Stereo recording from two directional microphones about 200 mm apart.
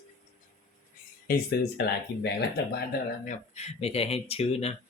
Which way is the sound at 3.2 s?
35° left (ahead or behind).